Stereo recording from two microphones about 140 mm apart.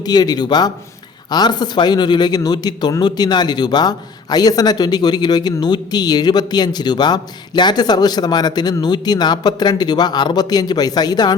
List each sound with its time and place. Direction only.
0.0 s speech: 30° left (ahead or behind)